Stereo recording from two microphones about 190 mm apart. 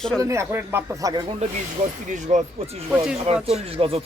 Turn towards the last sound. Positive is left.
turn(degrees=-30)  # may be behind; listen again after turning